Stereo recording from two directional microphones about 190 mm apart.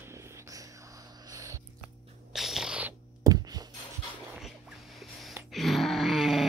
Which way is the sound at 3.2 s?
20° right (ahead or behind).